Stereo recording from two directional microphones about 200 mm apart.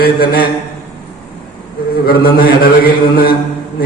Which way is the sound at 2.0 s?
50° left (ahead or behind).